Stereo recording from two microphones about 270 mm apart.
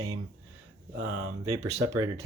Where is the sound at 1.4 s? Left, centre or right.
Centre.